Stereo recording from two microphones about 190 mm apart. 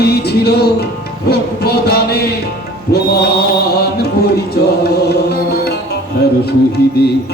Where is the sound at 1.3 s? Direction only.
55° left (ahead or behind).